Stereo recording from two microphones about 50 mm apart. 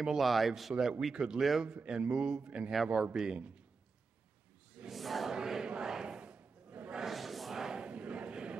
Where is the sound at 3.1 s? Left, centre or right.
Centre.